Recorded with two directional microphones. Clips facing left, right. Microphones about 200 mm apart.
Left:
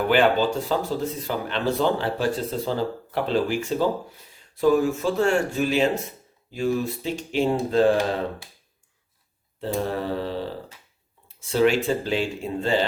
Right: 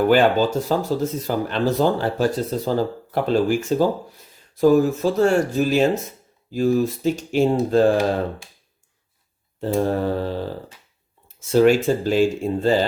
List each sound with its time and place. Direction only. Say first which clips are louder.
0.1 s speech: right 3 dB; 40° right (ahead or behind)
9.6 s speech: right 5 dB; 45° right (ahead or behind)
11.3 s speech: right 5 dB; 45° right (ahead or behind)